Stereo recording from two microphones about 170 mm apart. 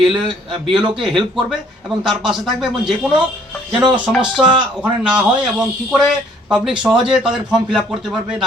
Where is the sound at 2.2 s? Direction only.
Centre (ahead or behind).